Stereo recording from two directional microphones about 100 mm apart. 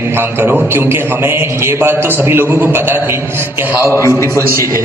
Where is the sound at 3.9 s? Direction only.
30° left (ahead or behind).